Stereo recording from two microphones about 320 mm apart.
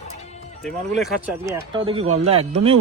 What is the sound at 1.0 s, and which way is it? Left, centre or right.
Speech, centre.